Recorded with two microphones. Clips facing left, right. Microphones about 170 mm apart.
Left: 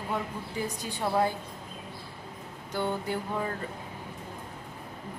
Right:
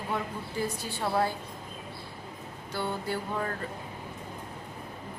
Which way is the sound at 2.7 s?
20° left (ahead or behind).